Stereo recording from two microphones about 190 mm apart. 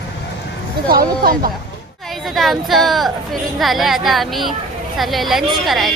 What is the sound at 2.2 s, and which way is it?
A woman's voice, centre (ahead or behind).